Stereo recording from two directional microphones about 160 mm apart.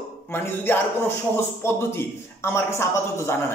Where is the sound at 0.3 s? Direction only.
15° left (ahead or behind).